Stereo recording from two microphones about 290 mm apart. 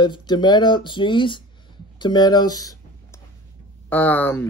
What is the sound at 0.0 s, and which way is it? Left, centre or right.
Speech, centre.